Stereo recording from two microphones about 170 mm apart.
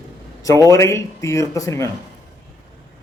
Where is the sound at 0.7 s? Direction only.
15° left (ahead or behind).